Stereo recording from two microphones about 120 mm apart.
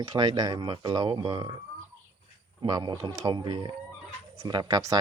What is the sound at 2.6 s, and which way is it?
Speech, 35° right (ahead or behind).